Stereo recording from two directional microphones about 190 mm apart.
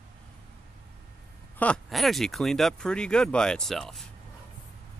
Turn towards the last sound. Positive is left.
turn(degrees=0)  # may be behind; listen again after turning